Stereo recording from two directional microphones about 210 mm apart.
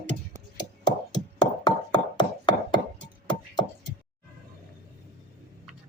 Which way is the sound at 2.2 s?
20° left (ahead or behind).